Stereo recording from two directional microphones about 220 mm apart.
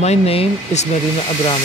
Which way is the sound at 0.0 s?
30° left (ahead or behind).